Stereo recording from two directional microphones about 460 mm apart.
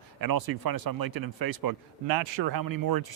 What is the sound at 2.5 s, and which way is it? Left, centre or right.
Speech, right.